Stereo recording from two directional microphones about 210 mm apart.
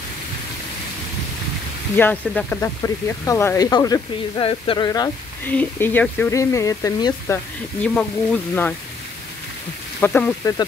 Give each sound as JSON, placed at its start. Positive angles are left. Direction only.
{"t": 2.0, "sound": "speech", "side_deg": 10}
{"t": 7.8, "sound": "speech", "side_deg": 5}
{"t": 9.9, "sound": "speech", "side_deg": 10}